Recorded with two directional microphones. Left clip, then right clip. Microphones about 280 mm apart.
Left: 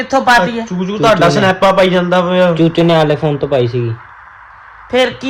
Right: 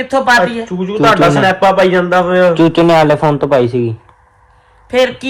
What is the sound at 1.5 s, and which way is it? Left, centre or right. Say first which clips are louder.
Speech: right 1 dB; centre.